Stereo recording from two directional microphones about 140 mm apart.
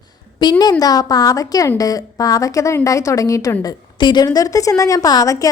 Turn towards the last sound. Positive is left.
turn(degrees=25)  # may be behind; listen again after turning